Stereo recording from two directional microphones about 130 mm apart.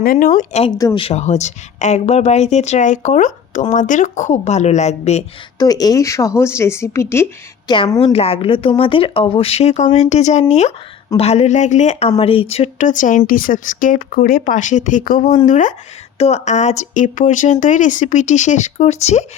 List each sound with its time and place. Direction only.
0.1 s speech: 90° left
0.9 s speech: 50° left (ahead or behind)
5.5 s speech: 30° left (ahead or behind)
7.7 s a woman's voice: 30° left (ahead or behind)
8.1 s speech: 50° left (ahead or behind)
12.8 s speech: 75° left (ahead or behind)
15.4 s speech: 75° left (ahead or behind)
16.1 s speech: 55° left (ahead or behind)